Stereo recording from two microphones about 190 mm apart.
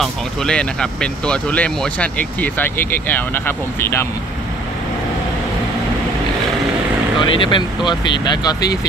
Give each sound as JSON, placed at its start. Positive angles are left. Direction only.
{"t": 0.0, "sound": "speech", "side_deg": 5}
{"t": 7.2, "sound": "speech", "side_deg": 25}